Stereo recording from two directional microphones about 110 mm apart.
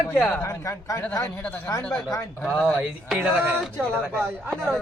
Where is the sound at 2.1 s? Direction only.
35° left (ahead or behind).